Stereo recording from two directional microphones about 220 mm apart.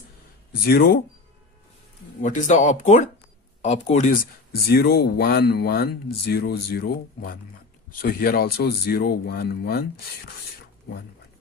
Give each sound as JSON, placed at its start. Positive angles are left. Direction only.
{"t": 0.7, "sound": "speech", "side_deg": 45}
{"t": 2.2, "sound": "speech", "side_deg": 35}
{"t": 4.6, "sound": "speech", "side_deg": 45}